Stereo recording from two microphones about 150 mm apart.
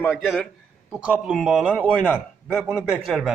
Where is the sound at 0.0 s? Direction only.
5° left (ahead or behind).